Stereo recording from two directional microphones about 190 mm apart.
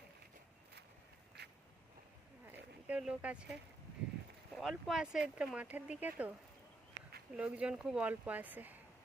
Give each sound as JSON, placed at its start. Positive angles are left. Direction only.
{"t": 1.4, "sound": "duck", "side_deg": -60}
{"t": 2.5, "sound": "a sound", "side_deg": -5}
{"t": 4.5, "sound": "speech", "side_deg": 0}
{"t": 7.3, "sound": "speech", "side_deg": -5}